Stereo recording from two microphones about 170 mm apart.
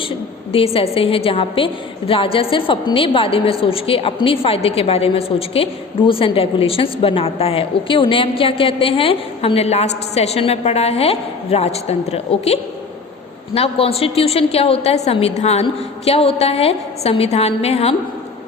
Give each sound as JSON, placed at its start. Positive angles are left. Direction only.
{"t": 0.5, "sound": "a woman's voice", "side_deg": 35}